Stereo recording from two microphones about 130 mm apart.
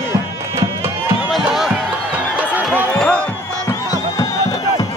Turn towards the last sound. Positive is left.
turn(degrees=10)  # may be behind; listen again after turning